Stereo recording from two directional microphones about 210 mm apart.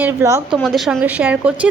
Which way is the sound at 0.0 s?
15° right (ahead or behind).